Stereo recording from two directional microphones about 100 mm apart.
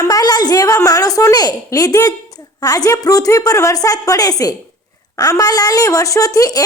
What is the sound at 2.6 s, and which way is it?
A woman's voice, 35° left (ahead or behind).